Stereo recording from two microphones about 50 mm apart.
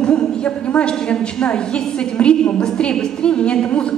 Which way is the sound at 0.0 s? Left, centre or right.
Centre.